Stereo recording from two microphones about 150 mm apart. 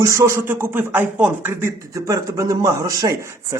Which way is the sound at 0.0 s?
20° right (ahead or behind).